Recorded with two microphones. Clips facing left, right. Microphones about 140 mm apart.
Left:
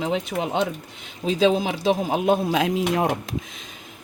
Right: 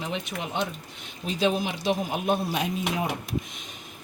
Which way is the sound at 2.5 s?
90° left.